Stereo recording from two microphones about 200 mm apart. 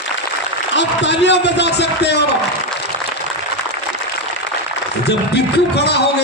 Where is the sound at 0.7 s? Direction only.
60° left (ahead or behind).